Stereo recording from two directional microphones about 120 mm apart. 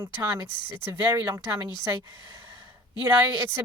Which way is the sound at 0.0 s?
20° right (ahead or behind).